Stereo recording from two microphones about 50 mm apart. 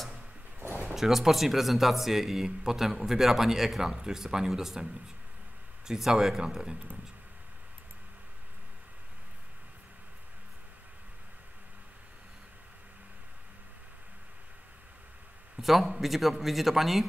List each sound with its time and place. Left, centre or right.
0.6 s a sound: right
0.9 s a man's voice: centre
5.9 s speech: centre
15.5 s a man's voice: centre